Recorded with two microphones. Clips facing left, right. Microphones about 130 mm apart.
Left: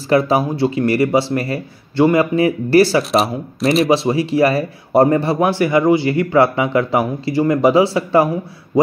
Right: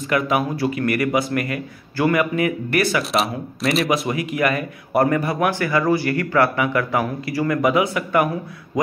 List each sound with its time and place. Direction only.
0.1 s a man's voice: 30° left (ahead or behind)
3.0 s speech: centre (ahead or behind)
3.9 s a man's voice: 30° left (ahead or behind)